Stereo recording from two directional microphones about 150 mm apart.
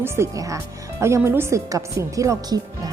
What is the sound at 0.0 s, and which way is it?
A woman's voice, 20° right (ahead or behind).